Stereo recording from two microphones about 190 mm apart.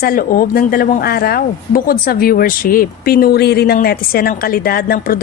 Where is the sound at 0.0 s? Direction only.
50° left (ahead or behind).